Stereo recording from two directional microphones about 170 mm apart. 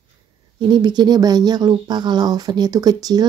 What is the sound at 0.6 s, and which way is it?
Speech, 25° right (ahead or behind).